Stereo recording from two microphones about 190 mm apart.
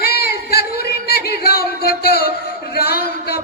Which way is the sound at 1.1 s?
50° left (ahead or behind).